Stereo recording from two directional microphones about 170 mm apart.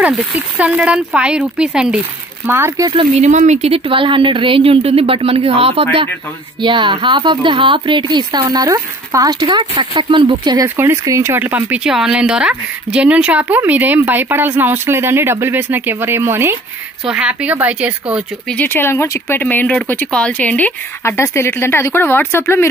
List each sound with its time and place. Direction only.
0.0 s speech: 5° right (ahead or behind)
3.0 s a woman's voice: 45° right (ahead or behind); by 18.2 s 10° right (ahead or behind)
18.5 s speech: 10° left (ahead or behind)